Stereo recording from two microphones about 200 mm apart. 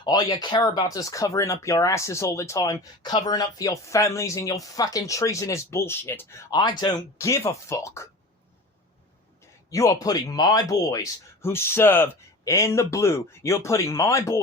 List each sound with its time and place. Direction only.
0.0 s speech: 20° left (ahead or behind)
9.6 s speech: 15° left (ahead or behind)